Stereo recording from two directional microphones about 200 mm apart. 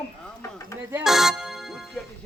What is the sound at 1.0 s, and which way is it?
Music, centre (ahead or behind).